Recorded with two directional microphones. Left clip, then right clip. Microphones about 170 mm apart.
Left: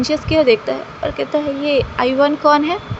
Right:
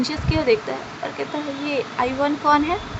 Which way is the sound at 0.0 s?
20° left (ahead or behind).